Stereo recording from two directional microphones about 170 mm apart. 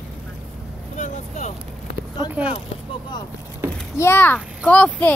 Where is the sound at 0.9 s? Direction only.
45° left (ahead or behind).